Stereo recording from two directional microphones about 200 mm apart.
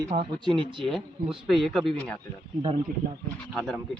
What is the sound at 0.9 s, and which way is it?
Speech, centre (ahead or behind).